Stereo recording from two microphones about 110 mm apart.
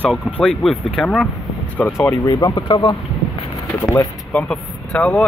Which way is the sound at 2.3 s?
40° left (ahead or behind).